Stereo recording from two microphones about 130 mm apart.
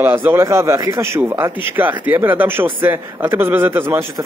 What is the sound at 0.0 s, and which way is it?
A man's voice, 15° right (ahead or behind).